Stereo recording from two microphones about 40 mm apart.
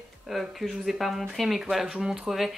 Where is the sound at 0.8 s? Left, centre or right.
Centre.